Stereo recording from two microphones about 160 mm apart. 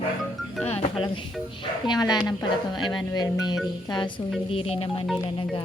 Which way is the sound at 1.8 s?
25° left (ahead or behind).